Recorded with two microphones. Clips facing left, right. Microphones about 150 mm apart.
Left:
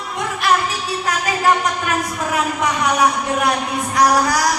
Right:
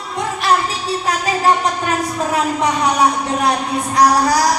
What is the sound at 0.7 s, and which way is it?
Music, 30° right (ahead or behind).